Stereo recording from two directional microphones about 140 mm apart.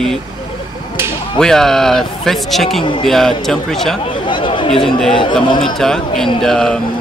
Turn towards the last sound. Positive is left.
turn(degrees=5)  # may be behind; listen again after turning